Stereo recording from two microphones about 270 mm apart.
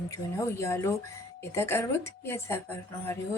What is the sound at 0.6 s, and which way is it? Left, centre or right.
A woman's voice, centre.